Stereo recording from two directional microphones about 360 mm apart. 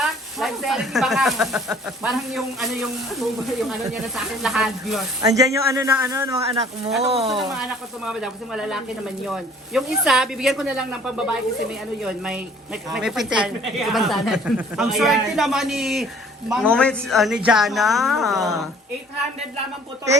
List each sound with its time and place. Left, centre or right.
0.3 s speech: centre
7.4 s speech: centre